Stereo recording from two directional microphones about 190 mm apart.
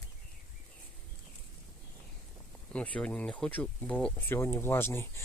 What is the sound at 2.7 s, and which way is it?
Speech, 5° left (ahead or behind).